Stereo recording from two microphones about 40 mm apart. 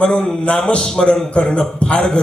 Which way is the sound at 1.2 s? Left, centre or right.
Left.